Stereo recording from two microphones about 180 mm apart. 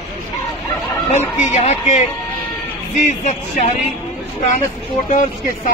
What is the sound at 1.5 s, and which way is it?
Speech, 40° left (ahead or behind).